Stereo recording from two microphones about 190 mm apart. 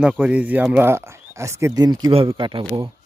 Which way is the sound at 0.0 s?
5° right (ahead or behind).